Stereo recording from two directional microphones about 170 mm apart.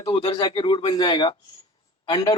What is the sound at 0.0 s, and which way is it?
A man's voice, 25° left (ahead or behind).